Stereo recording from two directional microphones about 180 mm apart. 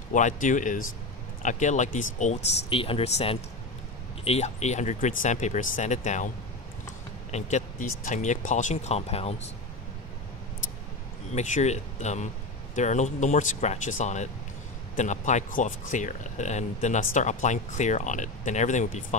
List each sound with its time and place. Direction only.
0.1 s speech: 45° left (ahead or behind)
11.3 s speech: 40° left (ahead or behind)